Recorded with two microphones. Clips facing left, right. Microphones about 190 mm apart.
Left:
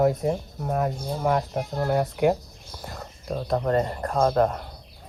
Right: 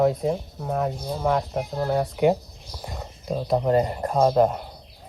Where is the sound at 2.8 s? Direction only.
Centre (ahead or behind).